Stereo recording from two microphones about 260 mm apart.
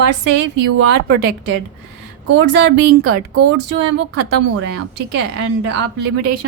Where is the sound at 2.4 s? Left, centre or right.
Right.